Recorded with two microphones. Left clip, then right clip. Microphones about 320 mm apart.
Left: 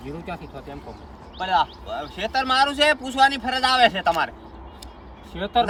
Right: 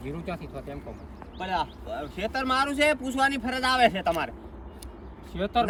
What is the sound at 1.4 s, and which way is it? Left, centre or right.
Speech, centre.